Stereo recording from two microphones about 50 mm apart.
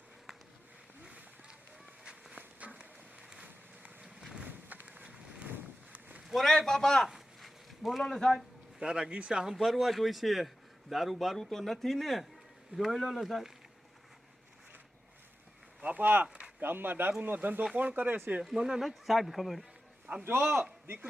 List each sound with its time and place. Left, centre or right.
2.4 s a sound: right
4.0 s run: centre
4.4 s a sound: right
6.2 s a man's voice: centre
7.1 s a sound: centre
8.0 s speech: centre
8.4 s speech: centre
15.8 s speech: right
18.4 s speech: centre
20.1 s speech: right
20.4 s a man's voice: centre
20.8 s a man's voice: right